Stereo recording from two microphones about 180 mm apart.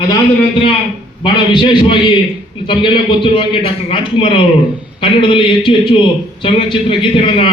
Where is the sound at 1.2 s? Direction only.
25° left (ahead or behind).